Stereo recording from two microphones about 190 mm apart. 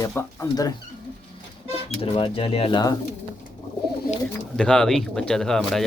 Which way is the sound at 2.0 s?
30° left (ahead or behind).